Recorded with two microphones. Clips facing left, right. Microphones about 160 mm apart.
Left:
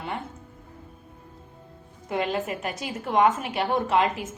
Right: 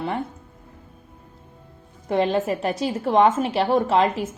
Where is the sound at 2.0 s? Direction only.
30° right (ahead or behind).